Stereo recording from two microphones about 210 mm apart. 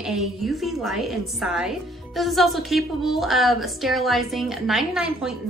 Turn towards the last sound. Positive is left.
turn(degrees=0)  # may be behind; listen again after turning